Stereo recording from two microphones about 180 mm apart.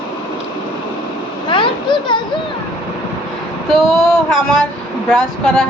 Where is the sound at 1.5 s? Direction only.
25° left (ahead or behind).